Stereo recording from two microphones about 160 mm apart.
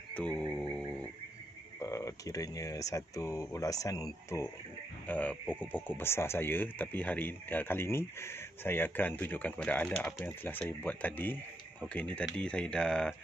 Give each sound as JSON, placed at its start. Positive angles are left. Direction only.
{"t": 0.1, "sound": "music", "side_deg": 5}
{"t": 1.8, "sound": "speech", "side_deg": 20}
{"t": 5.0, "sound": "speech", "side_deg": 10}